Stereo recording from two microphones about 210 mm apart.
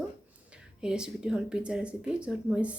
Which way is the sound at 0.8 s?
5° right (ahead or behind).